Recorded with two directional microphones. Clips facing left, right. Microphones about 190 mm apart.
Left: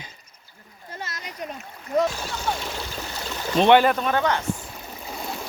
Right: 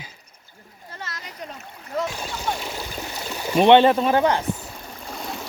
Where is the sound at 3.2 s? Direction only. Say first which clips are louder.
Right 2 dB; 10° right (ahead or behind).